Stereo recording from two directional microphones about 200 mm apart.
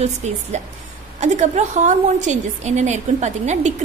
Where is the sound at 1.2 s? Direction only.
35° right (ahead or behind).